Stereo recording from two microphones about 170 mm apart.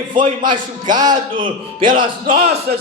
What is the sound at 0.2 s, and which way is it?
Speech, 50° right (ahead or behind).